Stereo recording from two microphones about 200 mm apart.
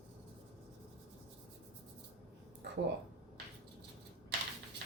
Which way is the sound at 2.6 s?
55° right (ahead or behind).